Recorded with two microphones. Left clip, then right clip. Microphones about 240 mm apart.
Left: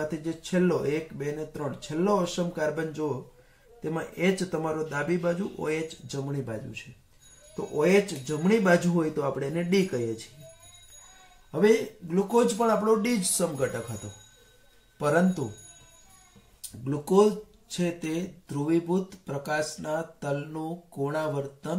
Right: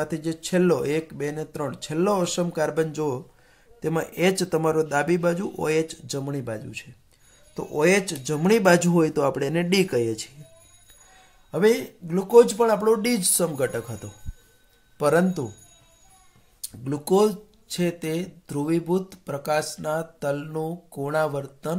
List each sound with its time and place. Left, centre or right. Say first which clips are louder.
0.0 s speech: right 4 dB; right
11.5 s speech: right 2 dB; right
15.0 s speech: right 4 dB; right
17.0 s speech: right 1 dB; right